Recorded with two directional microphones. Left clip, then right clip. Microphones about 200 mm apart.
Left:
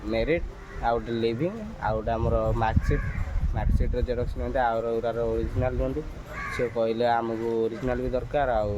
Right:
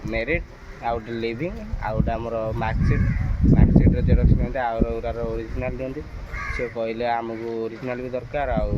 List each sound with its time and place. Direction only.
0.1 s speech: 15° left (ahead or behind)